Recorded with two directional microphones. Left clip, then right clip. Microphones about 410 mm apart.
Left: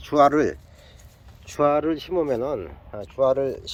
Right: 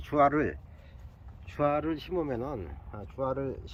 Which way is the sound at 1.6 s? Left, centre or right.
Centre.